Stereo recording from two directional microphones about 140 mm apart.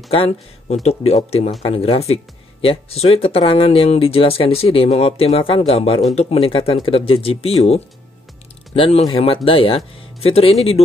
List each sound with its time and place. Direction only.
0.1 s speech: 45° left (ahead or behind)